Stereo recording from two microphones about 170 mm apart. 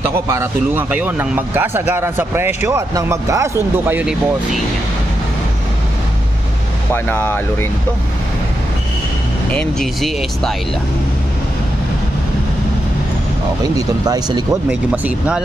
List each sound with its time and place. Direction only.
0.3 s a man's voice: 15° right (ahead or behind)
6.9 s speech: 15° left (ahead or behind)
9.5 s speech: 5° left (ahead or behind)
13.7 s speech: 20° right (ahead or behind)
14.7 s speech: 5° right (ahead or behind)